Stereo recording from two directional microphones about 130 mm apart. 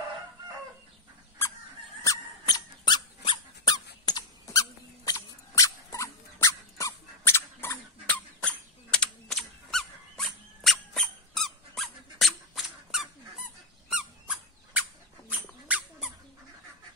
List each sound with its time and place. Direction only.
2.0 s squeak: 30° left (ahead or behind)
8.4 s squeak: 10° left (ahead or behind); by 14.9 s 10° right (ahead or behind)
15.3 s dog: 10° right (ahead or behind)